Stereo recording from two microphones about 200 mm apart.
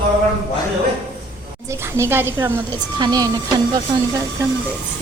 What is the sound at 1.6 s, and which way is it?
A woman's voice, 15° right (ahead or behind).